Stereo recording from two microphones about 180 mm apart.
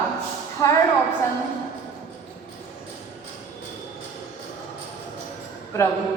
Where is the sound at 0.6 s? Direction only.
20° left (ahead or behind).